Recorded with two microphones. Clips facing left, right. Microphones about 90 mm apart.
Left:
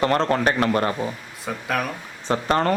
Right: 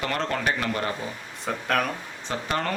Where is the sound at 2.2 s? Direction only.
40° left (ahead or behind).